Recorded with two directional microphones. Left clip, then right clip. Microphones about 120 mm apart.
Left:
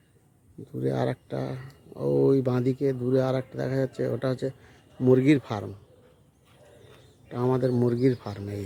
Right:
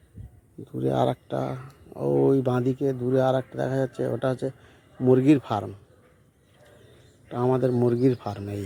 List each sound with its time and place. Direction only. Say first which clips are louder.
0.8 s speech: right 4 dB; 5° left (ahead or behind)
7.3 s speech: right 2 dB; 10° left (ahead or behind)